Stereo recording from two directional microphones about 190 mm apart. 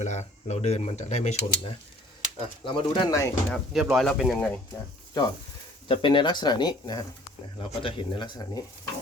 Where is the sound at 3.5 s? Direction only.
Centre (ahead or behind).